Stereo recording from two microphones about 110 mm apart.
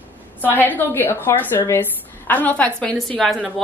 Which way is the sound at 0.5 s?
15° left (ahead or behind).